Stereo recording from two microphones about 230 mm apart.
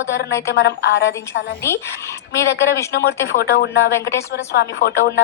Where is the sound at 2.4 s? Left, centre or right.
Left.